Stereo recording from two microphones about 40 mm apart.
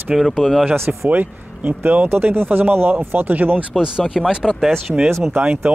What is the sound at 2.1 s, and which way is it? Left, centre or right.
Speech, right.